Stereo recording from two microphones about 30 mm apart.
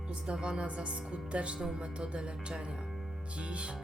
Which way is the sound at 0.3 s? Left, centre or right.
Right.